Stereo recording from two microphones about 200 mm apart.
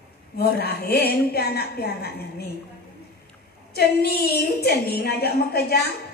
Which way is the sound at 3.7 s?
55° left (ahead or behind).